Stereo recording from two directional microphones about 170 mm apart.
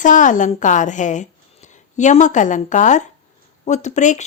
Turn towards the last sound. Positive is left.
turn(degrees=45)  # may be behind; listen again after turning